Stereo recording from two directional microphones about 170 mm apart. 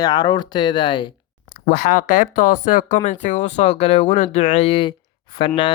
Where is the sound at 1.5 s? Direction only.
50° left (ahead or behind).